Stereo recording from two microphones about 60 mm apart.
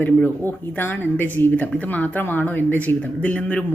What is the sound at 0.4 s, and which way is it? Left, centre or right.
Speech, left.